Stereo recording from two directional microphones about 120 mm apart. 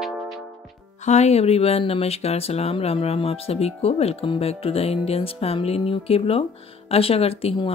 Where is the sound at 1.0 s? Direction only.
65° left (ahead or behind).